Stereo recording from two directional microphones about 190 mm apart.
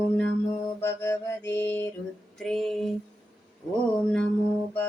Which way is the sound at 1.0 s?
15° left (ahead or behind).